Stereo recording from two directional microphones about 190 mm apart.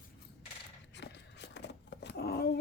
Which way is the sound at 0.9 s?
65° left (ahead or behind).